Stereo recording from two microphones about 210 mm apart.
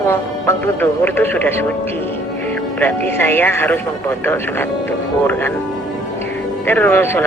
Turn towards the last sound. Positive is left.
turn(degrees=10)  # may be behind; listen again after turning